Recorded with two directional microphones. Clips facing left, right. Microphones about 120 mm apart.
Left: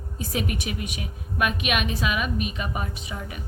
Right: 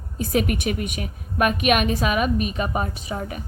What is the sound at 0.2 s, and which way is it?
A woman's voice, 55° right (ahead or behind).